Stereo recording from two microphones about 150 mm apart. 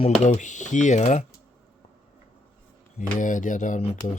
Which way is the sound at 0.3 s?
55° left (ahead or behind).